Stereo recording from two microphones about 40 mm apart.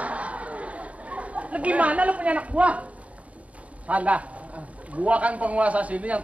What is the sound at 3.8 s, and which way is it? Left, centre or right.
A man's voice, right.